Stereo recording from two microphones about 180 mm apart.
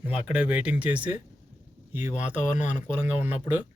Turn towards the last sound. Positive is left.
turn(degrees=35)  # may be behind; listen again after turning